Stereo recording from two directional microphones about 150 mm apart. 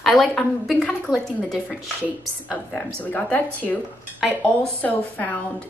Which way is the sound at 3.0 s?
10° left (ahead or behind).